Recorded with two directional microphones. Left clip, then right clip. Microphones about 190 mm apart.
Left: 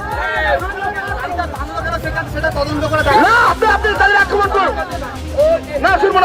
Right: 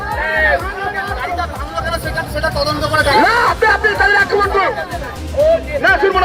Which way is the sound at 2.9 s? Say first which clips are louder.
Left 1 dB; 30° right (ahead or behind).